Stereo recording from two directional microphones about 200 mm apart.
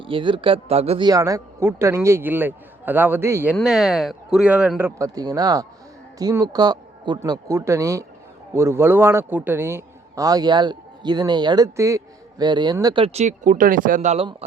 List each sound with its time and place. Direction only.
0.0 s a man's voice: 25° right (ahead or behind)